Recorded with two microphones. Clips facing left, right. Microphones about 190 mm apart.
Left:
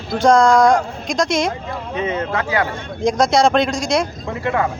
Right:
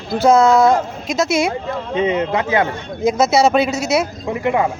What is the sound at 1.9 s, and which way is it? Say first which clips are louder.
Speech: right 4 dB; 20° right (ahead or behind).